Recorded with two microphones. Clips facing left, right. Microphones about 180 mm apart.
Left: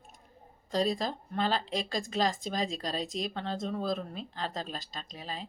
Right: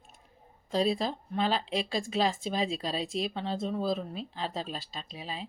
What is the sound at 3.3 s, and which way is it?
Speech, 5° right (ahead or behind).